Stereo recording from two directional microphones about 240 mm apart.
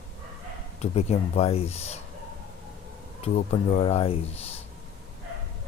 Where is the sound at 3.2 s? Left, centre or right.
Left.